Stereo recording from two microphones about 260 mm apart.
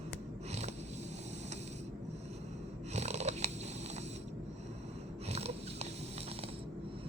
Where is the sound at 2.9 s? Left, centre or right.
Right.